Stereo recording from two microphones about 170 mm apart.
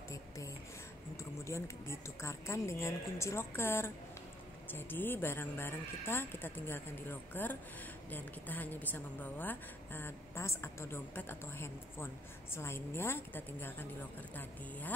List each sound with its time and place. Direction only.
1.1 s a woman's voice: 15° left (ahead or behind)